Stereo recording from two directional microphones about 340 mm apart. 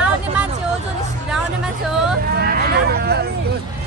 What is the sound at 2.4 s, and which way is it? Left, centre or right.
Speech, right.